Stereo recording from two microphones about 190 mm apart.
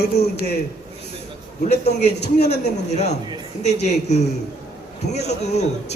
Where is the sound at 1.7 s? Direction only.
35° left (ahead or behind).